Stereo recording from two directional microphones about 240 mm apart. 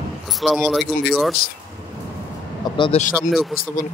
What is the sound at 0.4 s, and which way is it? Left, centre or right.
Speech, centre.